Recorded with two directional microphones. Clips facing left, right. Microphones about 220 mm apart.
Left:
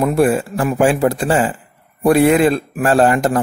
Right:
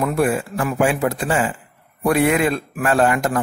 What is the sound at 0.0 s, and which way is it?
A man's voice, 30° left (ahead or behind).